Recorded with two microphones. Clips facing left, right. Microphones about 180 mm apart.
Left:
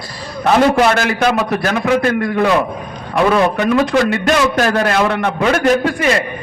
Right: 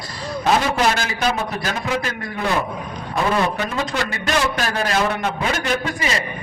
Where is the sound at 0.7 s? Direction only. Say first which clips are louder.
Left 7 dB; 55° left (ahead or behind).